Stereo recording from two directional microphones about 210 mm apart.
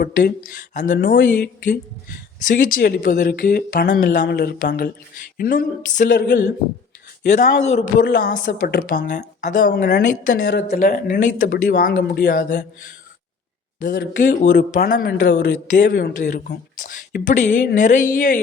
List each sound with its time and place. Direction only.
0.0 s speech: 45° left (ahead or behind)
7.3 s speech: 35° left (ahead or behind)
8.0 s speech: 45° left (ahead or behind)
13.7 s a woman's voice: 40° left (ahead or behind)